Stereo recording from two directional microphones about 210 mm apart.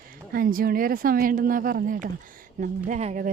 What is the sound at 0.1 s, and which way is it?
Speech, 40° right (ahead or behind).